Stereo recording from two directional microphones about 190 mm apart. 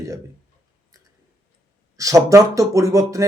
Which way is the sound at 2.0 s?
15° right (ahead or behind).